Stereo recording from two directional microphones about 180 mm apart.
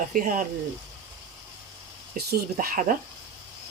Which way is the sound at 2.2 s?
50° right (ahead or behind).